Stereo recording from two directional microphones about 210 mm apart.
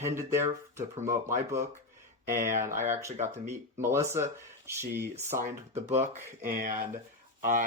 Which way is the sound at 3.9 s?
10° right (ahead or behind).